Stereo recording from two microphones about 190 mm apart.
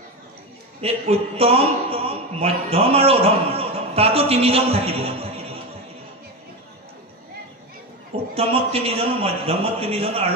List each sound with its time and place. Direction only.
0.7 s a man's voice: 30° right (ahead or behind)
8.4 s a man's voice: 30° right (ahead or behind)